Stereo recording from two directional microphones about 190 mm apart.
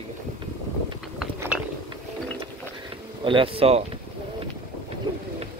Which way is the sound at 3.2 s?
25° right (ahead or behind).